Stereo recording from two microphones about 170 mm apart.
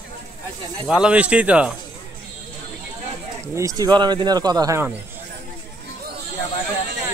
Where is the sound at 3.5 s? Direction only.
20° right (ahead or behind).